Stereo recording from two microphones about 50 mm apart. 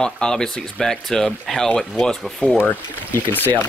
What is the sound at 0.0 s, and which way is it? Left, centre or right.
Speech, centre.